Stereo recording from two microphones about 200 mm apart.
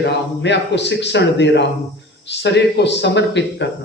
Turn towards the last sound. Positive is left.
turn(degrees=60)  # may be behind; listen again after turning